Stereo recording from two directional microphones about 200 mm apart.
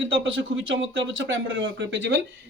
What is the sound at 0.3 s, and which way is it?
Speech, 70° right (ahead or behind).